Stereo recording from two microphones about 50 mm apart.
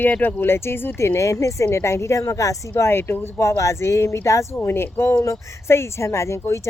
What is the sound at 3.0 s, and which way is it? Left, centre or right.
Speech, left.